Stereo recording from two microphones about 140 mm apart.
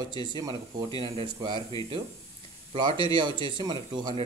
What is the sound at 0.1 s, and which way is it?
Speech, 35° right (ahead or behind).